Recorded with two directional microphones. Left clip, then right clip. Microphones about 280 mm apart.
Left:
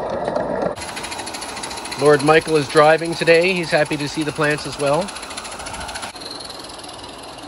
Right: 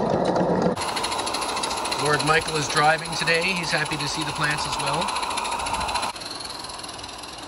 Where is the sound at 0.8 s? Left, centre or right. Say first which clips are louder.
Right 3 dB; right.